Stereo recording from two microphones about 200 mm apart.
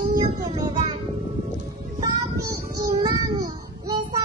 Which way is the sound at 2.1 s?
20° right (ahead or behind).